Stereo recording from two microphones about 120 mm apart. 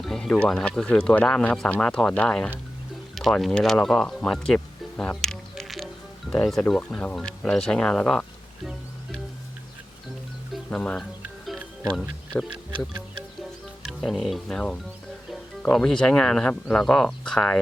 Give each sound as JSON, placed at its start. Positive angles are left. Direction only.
{"t": 0.0, "sound": "speech", "side_deg": 5}
{"t": 10.5, "sound": "music", "side_deg": 5}
{"t": 11.9, "sound": "speech", "side_deg": 0}
{"t": 12.5, "sound": "speech", "side_deg": -45}
{"t": 13.8, "sound": "speech", "side_deg": 0}